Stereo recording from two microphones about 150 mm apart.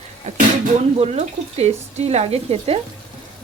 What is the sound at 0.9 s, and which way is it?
Speech, 45° right (ahead or behind).